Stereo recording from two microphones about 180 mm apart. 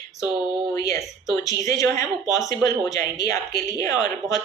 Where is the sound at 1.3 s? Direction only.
20° left (ahead or behind).